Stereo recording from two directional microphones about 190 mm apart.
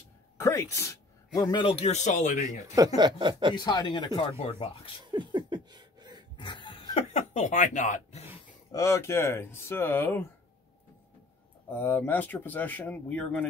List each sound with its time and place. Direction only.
0.4 s speech: 15° left (ahead or behind); by 2.4 s 40° left (ahead or behind)
3.0 s speech: 25° right (ahead or behind)
3.5 s speech: 25° left (ahead or behind)
5.0 s a sound: 25° right (ahead or behind)
6.3 s chuckle: 25° left (ahead or behind)
8.7 s speech: 15° left (ahead or behind)
11.7 s speech: 10° left (ahead or behind)